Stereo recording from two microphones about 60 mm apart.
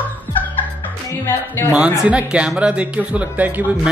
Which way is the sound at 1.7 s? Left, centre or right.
Centre.